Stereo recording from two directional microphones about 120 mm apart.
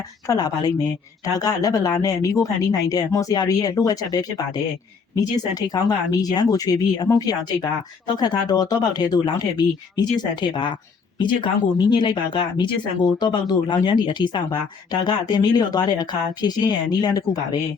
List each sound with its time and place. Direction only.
0.3 s speech: 35° left (ahead or behind)